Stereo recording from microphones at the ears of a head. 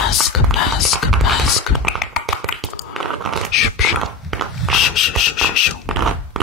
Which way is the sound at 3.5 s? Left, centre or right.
Left.